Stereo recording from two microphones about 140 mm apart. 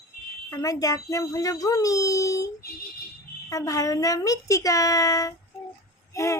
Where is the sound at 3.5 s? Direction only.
25° left (ahead or behind).